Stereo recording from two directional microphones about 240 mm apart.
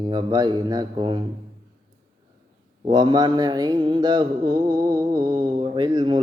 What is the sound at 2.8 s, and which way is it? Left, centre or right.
Mantra, centre.